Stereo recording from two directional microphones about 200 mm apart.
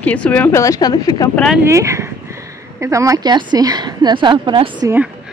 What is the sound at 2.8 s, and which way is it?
Speech, 15° right (ahead or behind).